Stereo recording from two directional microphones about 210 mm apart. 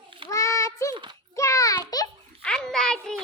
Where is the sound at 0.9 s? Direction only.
20° right (ahead or behind).